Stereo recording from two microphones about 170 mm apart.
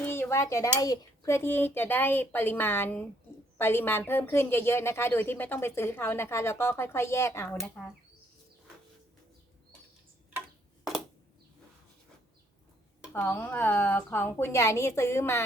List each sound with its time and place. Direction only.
0.0 s a woman's voice: 15° left (ahead or behind)
13.1 s a woman's voice: 10° left (ahead or behind)